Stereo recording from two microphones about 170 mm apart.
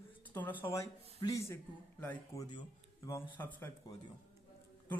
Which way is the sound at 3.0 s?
15° left (ahead or behind).